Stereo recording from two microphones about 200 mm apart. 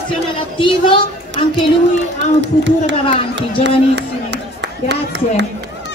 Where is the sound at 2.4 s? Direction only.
65° right (ahead or behind).